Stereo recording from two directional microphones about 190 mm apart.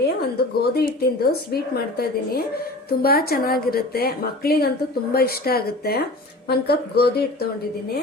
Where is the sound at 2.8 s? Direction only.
55° left (ahead or behind).